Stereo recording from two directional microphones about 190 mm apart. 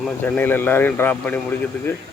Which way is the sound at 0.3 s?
10° left (ahead or behind).